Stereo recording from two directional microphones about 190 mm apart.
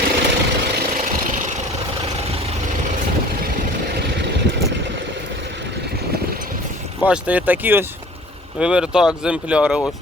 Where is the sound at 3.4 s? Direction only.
55° right (ahead or behind).